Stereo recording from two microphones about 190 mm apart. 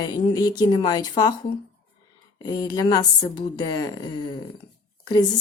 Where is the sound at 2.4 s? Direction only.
20° left (ahead or behind).